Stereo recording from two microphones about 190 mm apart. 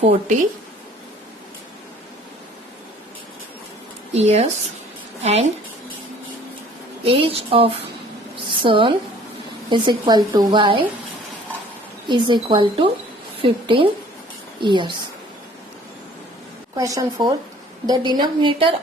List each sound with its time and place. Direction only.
4.1 s speech: 35° right (ahead or behind)
7.0 s a woman's voice: 30° right (ahead or behind)
12.0 s a woman's voice: 25° right (ahead or behind)
16.7 s a woman's voice: 15° right (ahead or behind)